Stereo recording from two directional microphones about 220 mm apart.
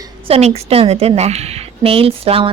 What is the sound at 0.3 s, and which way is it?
A woman's voice, 30° right (ahead or behind).